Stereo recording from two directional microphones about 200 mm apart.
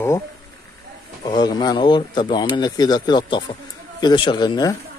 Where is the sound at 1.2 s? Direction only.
20° left (ahead or behind).